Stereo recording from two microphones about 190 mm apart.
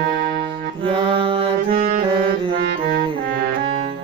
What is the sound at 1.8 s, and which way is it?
Saxophone, 45° right (ahead or behind).